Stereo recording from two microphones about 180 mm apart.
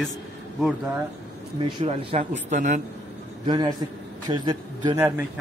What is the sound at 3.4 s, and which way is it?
A man's voice, 25° right (ahead or behind).